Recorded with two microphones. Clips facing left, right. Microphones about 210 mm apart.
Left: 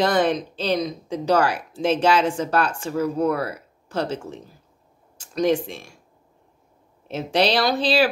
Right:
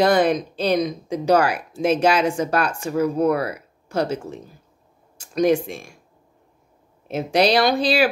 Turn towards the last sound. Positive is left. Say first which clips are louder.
# right 3 dB
turn(degrees=-10)  # may be behind; listen again after turning